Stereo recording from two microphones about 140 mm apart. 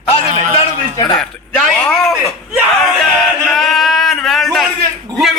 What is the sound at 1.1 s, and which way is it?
A man's voice, 5° left (ahead or behind).